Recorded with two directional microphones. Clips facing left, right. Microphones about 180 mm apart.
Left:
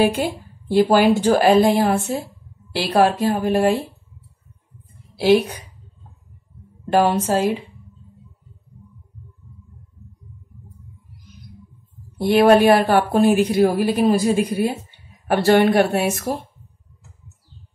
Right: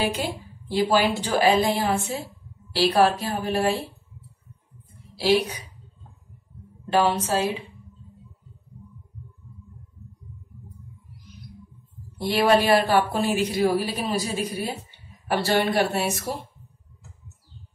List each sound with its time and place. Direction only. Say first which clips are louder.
0.7 s a woman's voice: left 7 dB; 50° left (ahead or behind)
5.1 s a woman's voice: left 6 dB; 55° left (ahead or behind)
6.9 s a woman's voice: left 4 dB; 50° left (ahead or behind)
12.2 s a woman's voice: left 7 dB; 50° left (ahead or behind)